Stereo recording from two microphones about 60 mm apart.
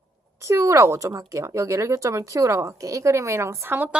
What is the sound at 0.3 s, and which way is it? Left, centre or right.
Speech, right.